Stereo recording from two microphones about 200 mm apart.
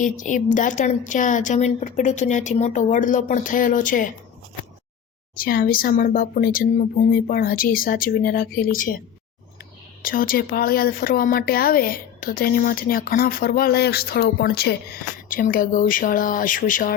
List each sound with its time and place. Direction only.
0.0 s a woman's voice: 40° left (ahead or behind)
5.3 s speech: 45° left (ahead or behind)
10.0 s speech: 45° left (ahead or behind)